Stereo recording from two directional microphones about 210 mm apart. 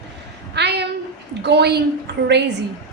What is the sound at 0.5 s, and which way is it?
A man's voice, 55° right (ahead or behind).